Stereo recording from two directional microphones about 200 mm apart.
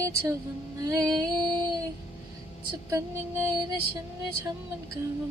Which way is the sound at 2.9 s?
15° right (ahead or behind).